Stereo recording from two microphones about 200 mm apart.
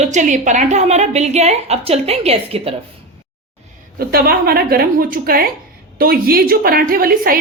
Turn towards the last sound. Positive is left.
turn(degrees=-45)  # may be behind; listen again after turning